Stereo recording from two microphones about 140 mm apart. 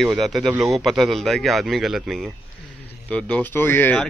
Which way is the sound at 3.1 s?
10° left (ahead or behind).